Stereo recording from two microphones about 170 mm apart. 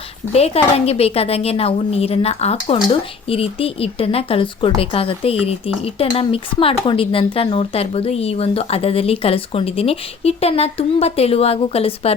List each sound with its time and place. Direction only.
0.3 s a woman's voice: 35° left (ahead or behind)